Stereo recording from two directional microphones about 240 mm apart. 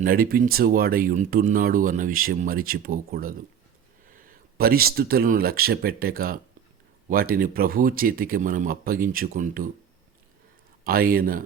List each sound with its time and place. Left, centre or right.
0.0 s speech: right
10.8 s speech: right